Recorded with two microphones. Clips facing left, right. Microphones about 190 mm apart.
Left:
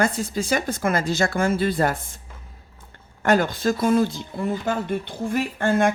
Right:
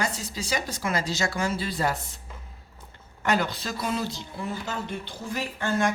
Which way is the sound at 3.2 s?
50° left (ahead or behind).